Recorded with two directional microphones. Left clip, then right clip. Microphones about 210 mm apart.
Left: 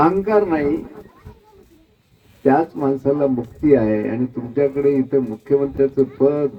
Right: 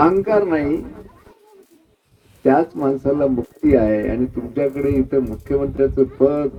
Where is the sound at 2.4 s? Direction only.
20° right (ahead or behind).